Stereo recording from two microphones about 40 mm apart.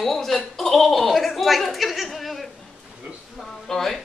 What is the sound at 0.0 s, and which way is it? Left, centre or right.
Speech, centre.